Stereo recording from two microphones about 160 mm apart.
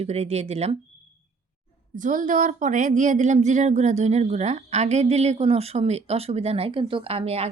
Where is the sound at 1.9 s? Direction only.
55° right (ahead or behind).